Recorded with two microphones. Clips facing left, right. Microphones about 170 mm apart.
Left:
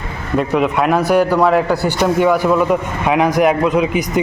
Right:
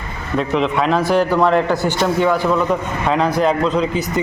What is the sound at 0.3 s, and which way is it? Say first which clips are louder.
Speech: left 2 dB; 5° left (ahead or behind).